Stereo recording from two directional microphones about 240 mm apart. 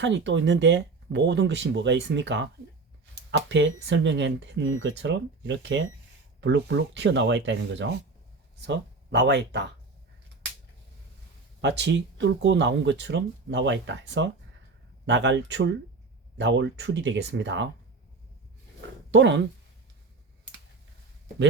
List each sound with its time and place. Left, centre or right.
0.0 s speech: right
11.6 s speech: right
19.1 s speech: right